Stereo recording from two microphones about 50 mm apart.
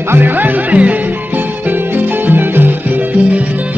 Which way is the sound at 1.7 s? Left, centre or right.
Right.